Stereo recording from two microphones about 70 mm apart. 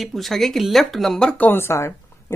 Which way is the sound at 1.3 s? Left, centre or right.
Left.